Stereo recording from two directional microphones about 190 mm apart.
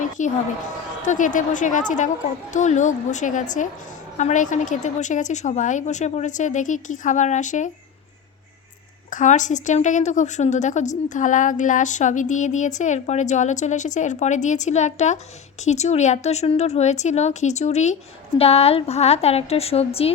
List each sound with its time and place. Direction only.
0.2 s a woman's voice: 40° left (ahead or behind)
9.0 s a woman's voice: 40° left (ahead or behind)